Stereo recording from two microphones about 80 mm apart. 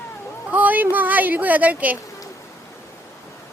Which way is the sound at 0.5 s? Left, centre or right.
Right.